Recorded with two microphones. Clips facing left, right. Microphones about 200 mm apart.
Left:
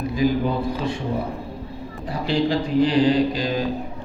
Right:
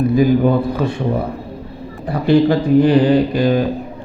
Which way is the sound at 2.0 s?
60° right (ahead or behind).